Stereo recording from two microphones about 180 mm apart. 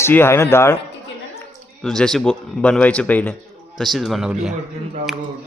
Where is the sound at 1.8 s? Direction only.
5° left (ahead or behind).